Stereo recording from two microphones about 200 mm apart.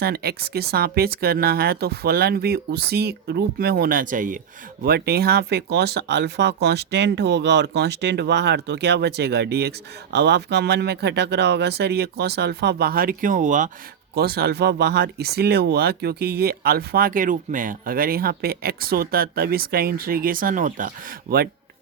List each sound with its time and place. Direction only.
0.0 s speech: 50° right (ahead or behind)
14.2 s speech: 50° right (ahead or behind)